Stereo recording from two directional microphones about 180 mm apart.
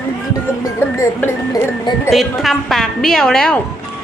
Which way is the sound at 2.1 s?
Centre (ahead or behind).